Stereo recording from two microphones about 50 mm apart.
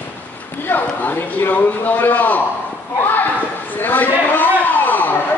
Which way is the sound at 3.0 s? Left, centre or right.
Left.